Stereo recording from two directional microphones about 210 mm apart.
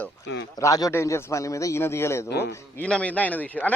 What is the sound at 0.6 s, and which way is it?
A man's voice, 15° left (ahead or behind).